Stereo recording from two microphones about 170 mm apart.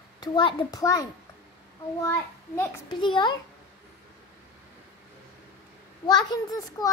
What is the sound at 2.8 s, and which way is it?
Speech, 25° left (ahead or behind).